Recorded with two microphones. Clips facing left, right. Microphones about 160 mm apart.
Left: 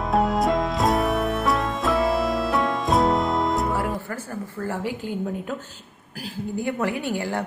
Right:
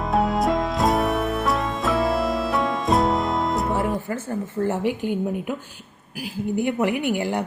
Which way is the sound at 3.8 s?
20° right (ahead or behind).